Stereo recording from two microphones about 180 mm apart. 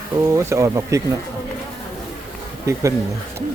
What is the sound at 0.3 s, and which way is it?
Speech, 15° right (ahead or behind).